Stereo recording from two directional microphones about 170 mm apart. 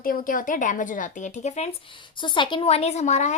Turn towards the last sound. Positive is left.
turn(degrees=45)  # may be behind; listen again after turning